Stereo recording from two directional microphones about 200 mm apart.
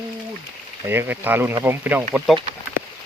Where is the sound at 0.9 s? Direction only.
10° right (ahead or behind).